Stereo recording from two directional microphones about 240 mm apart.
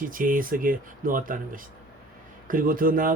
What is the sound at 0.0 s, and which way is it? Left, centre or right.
Speech, right.